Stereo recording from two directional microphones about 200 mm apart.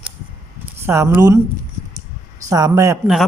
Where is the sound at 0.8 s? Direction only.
10° right (ahead or behind).